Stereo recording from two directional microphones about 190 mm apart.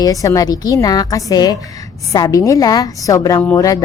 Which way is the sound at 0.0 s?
15° left (ahead or behind).